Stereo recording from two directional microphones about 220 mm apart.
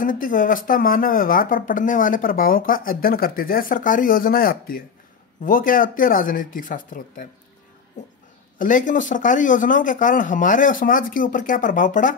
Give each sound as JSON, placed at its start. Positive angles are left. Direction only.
{"t": 0.0, "sound": "speech", "side_deg": 40}
{"t": 8.5, "sound": "speech", "side_deg": 35}